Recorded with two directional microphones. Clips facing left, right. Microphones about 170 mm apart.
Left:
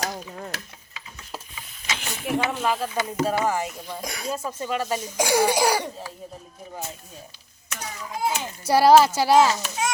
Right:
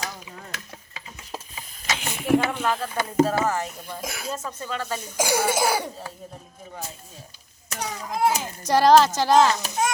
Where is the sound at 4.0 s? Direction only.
Centre (ahead or behind).